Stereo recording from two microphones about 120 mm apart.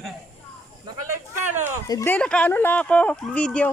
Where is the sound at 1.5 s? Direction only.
15° right (ahead or behind).